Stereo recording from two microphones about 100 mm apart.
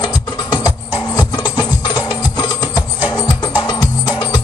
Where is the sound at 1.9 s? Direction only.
45° left (ahead or behind).